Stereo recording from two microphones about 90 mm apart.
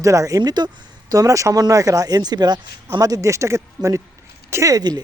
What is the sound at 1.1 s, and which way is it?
Speech, 40° right (ahead or behind).